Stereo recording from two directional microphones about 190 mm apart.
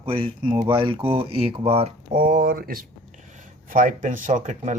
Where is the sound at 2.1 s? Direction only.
45° right (ahead or behind).